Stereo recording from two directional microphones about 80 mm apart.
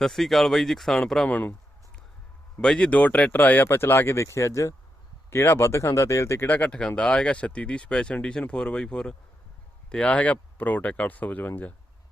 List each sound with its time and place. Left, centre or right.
0.0 s speech: centre
1.3 s speech: left
2.6 s speech: centre; by 6.6 s left
6.6 s speech: centre